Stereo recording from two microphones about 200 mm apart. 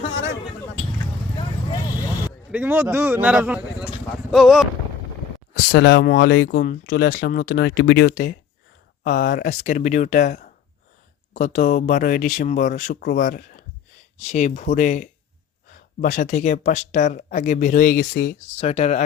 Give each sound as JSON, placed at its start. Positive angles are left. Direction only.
{"t": 1.4, "sound": "vehicle", "side_deg": 25}
{"t": 2.5, "sound": "a man's voice", "side_deg": -10}
{"t": 5.6, "sound": "speech", "side_deg": 50}
{"t": 18.6, "sound": "speech", "side_deg": 35}